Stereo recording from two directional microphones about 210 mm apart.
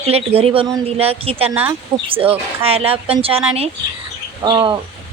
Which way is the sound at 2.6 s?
30° right (ahead or behind).